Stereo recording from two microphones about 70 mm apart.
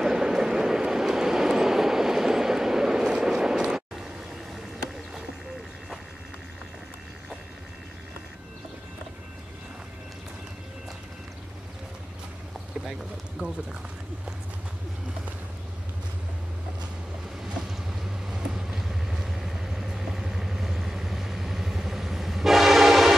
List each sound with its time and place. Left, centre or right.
0.0 s vehicle: centre
13.4 s a sound: right
18.3 s vehicle: centre